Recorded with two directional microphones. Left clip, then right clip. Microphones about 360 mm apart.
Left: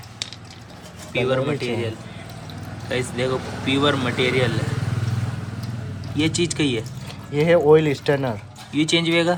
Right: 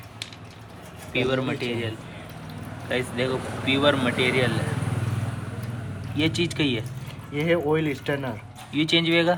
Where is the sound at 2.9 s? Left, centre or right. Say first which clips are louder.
Left 2 dB; centre.